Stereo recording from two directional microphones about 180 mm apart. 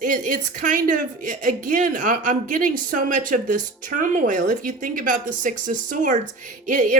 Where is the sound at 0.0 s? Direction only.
45° right (ahead or behind).